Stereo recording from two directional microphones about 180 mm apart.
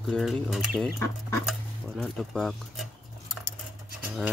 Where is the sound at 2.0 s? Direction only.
Centre (ahead or behind).